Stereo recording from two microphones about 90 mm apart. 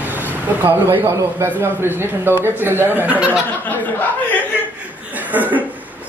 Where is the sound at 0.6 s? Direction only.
25° right (ahead or behind).